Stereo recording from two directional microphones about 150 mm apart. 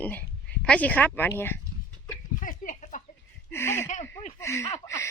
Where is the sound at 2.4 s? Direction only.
60° left (ahead or behind).